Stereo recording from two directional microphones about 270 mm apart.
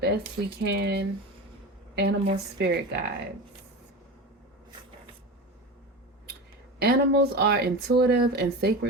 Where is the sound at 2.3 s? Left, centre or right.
Right.